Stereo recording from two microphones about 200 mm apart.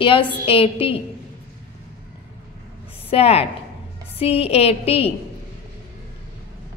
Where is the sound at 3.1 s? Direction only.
30° left (ahead or behind).